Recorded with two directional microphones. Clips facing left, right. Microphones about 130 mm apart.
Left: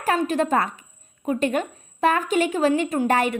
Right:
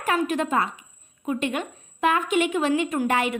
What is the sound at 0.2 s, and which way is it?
A woman's voice, 35° left (ahead or behind).